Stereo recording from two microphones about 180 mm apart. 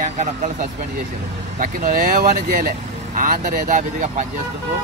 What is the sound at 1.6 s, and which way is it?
Speech, 50° right (ahead or behind).